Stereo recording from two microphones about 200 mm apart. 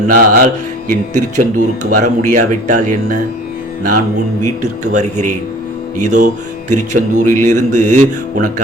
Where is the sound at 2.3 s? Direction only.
40° right (ahead or behind).